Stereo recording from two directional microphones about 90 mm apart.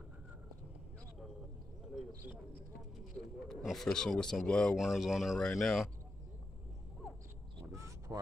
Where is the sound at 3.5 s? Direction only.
5° left (ahead or behind).